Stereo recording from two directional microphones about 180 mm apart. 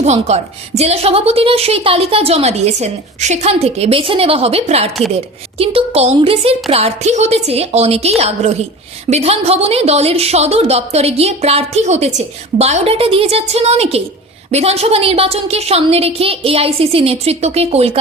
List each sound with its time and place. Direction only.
0.0 s a woman's voice: 40° right (ahead or behind)